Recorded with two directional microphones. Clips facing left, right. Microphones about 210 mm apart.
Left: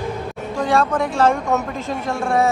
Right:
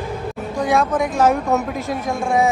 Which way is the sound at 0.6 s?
10° right (ahead or behind).